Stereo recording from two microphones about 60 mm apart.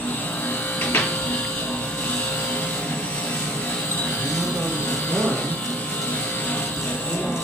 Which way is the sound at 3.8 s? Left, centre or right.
Left.